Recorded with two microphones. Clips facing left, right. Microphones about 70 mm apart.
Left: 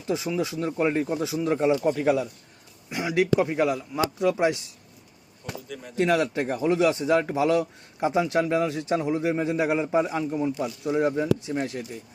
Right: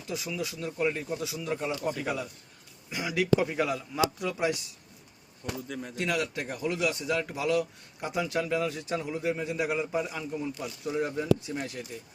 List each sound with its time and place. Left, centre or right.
0.1 s a man's voice: left
5.6 s speech: centre
6.0 s a man's voice: left